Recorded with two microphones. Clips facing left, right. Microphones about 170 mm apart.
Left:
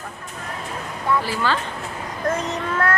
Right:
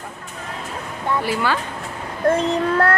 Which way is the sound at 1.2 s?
15° right (ahead or behind).